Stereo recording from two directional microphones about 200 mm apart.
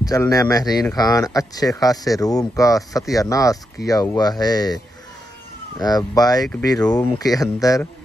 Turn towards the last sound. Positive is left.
turn(degrees=15)  # may be behind; listen again after turning